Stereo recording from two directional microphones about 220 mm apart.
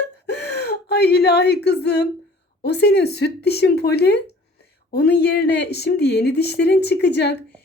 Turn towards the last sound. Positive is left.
turn(degrees=50)  # may be behind; listen again after turning